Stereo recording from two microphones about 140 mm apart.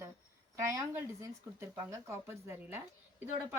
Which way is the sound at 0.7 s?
20° right (ahead or behind).